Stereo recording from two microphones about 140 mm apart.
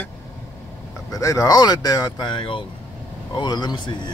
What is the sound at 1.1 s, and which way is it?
Speech, 25° left (ahead or behind).